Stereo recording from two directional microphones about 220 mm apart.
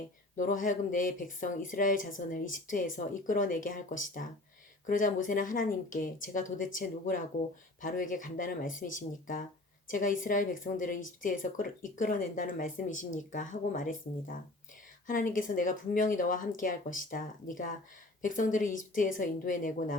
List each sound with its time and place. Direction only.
0.3 s speech: 35° left (ahead or behind)